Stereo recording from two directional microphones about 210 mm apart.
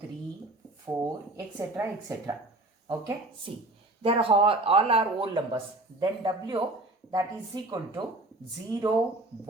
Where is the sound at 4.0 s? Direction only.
25° right (ahead or behind).